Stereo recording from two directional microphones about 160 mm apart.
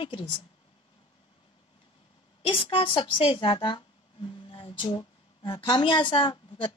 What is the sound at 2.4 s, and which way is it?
A woman's voice, 35° left (ahead or behind).